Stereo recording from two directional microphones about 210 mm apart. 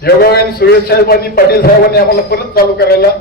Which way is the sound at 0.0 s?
45° left (ahead or behind).